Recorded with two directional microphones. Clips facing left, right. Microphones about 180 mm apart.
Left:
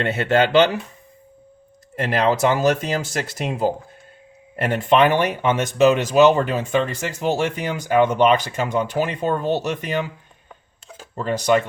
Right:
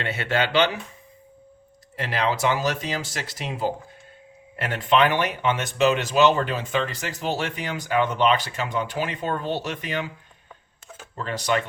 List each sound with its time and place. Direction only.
0.0 s speech: 50° left (ahead or behind)
2.0 s speech: 50° left (ahead or behind)
11.1 s speech: 45° left (ahead or behind)